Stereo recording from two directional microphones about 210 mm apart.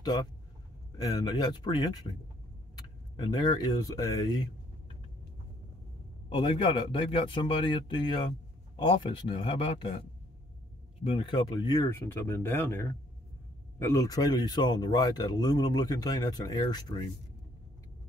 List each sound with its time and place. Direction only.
0.9 s speech: 20° left (ahead or behind)
3.2 s speech: 20° left (ahead or behind)
6.2 s speech: 25° left (ahead or behind)
11.1 s speech: 25° left (ahead or behind)